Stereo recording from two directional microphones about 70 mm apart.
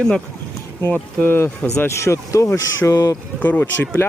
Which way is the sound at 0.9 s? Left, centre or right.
Left.